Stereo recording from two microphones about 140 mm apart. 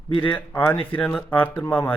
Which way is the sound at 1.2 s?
10° left (ahead or behind).